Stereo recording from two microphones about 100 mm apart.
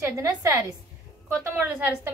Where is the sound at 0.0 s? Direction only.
30° right (ahead or behind).